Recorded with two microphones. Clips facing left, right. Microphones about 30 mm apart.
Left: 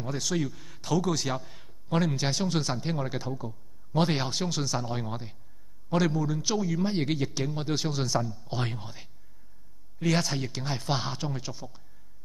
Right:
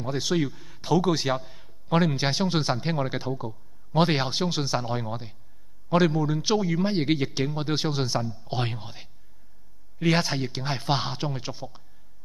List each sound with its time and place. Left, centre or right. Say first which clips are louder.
0.0 s a man's voice: right 4 dB; right
4.9 s a man's voice: right 3 dB; centre
5.9 s a man's voice: right 4 dB; right